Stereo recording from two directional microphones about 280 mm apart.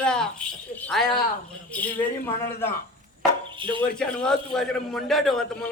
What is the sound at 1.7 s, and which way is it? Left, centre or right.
A man's voice, centre.